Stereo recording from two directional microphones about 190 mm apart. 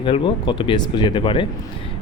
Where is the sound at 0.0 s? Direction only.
25° left (ahead or behind).